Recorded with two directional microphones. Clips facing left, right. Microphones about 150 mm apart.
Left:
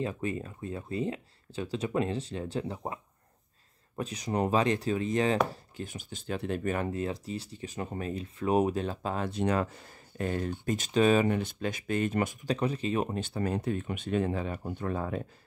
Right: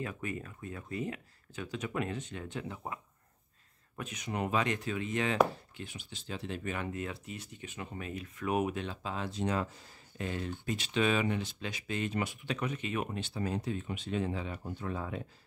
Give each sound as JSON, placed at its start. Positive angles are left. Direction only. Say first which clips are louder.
{"t": 0.0, "sound": "speech", "louder": "left 6 dB", "side_deg": 30}
{"t": 6.9, "sound": "speech", "louder": "left 6 dB", "side_deg": 30}
{"t": 13.2, "sound": "speech", "louder": "left 4 dB", "side_deg": 50}